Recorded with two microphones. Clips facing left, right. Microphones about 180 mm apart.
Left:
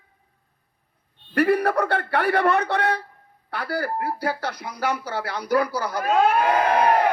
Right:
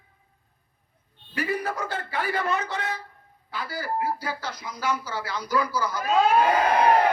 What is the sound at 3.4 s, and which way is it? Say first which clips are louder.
Speech: left 5 dB; 65° left (ahead or behind).